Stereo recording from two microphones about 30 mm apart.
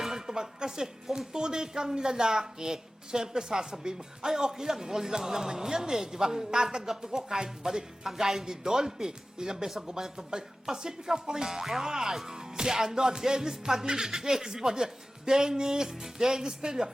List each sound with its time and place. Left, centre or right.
0.0 s a sound: centre
0.3 s a woman's voice: right
9.6 s a woman's voice: centre